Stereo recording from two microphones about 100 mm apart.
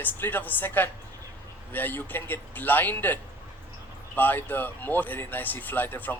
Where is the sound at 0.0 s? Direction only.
20° left (ahead or behind).